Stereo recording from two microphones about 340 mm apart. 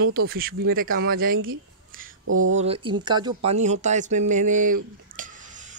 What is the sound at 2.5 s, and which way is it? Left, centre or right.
Speech, centre.